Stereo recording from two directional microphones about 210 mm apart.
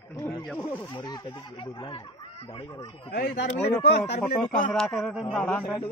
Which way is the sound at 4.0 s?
5° left (ahead or behind).